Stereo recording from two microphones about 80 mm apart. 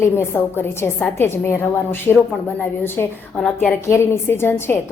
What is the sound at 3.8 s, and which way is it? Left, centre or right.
Speech, left.